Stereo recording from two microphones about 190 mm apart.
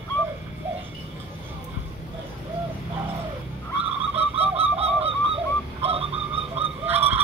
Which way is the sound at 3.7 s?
30° right (ahead or behind).